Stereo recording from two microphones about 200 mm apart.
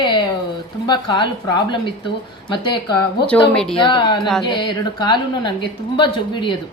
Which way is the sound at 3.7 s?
25° left (ahead or behind).